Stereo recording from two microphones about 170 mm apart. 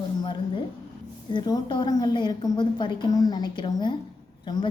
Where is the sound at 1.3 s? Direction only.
25° left (ahead or behind).